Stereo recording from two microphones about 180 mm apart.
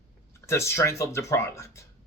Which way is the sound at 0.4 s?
15° left (ahead or behind).